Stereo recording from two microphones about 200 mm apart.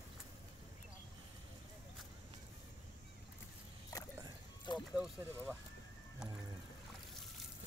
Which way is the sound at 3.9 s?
15° left (ahead or behind).